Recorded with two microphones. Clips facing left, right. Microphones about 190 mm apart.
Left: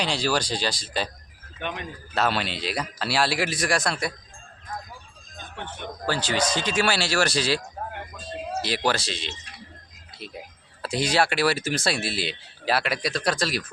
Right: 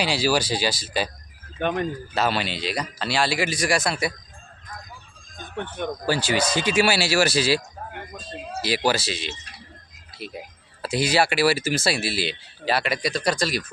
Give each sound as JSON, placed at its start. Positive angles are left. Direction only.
{"t": 0.0, "sound": "speech", "side_deg": -5}
{"t": 1.5, "sound": "speech", "side_deg": -45}
{"t": 2.1, "sound": "speech", "side_deg": 0}
{"t": 6.1, "sound": "speech", "side_deg": -10}
{"t": 8.6, "sound": "speech", "side_deg": -5}
{"t": 10.8, "sound": "speech", "side_deg": -5}